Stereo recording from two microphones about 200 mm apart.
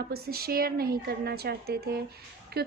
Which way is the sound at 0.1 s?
50° right (ahead or behind).